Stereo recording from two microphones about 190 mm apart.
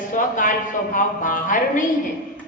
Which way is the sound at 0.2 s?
45° left (ahead or behind).